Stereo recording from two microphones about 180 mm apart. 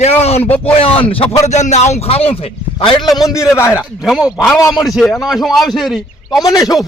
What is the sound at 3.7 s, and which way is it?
A man's voice, 5° right (ahead or behind).